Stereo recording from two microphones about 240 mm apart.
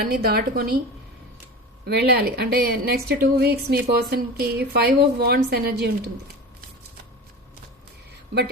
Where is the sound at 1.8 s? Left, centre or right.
Right.